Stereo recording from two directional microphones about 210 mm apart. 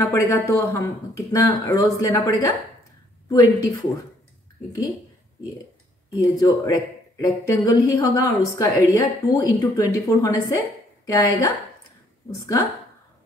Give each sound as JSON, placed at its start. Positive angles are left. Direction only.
{"t": 0.0, "sound": "speech", "side_deg": 15}
{"t": 6.1, "sound": "speech", "side_deg": 15}